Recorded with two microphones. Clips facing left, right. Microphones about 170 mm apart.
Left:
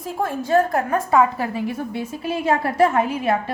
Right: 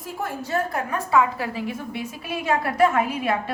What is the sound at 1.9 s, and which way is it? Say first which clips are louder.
A woman's voice: left 5 dB; 30° left (ahead or behind).